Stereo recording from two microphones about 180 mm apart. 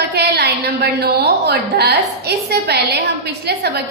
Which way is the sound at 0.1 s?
65° right (ahead or behind).